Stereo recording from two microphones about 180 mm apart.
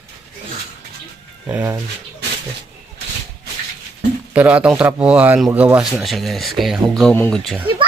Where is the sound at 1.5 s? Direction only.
15° right (ahead or behind).